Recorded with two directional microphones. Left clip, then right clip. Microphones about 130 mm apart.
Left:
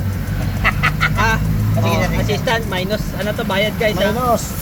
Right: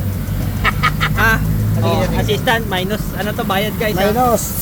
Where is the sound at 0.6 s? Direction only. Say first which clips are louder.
Even; 40° right (ahead or behind).